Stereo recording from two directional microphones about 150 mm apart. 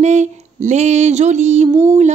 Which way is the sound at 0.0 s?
50° right (ahead or behind).